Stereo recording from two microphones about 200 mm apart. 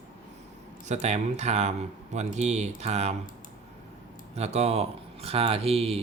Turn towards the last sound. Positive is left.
turn(degrees=-30)  # may be behind; listen again after turning